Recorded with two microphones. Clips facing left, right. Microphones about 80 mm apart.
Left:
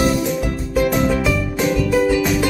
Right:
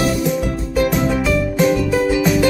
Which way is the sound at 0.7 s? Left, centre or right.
Centre.